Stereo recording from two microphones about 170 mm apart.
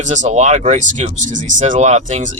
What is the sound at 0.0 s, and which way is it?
Speech, 45° right (ahead or behind).